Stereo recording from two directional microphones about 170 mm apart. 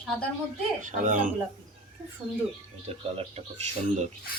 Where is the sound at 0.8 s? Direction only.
45° right (ahead or behind).